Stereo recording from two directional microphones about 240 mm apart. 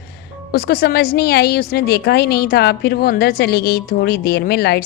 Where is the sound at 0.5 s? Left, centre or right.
Left.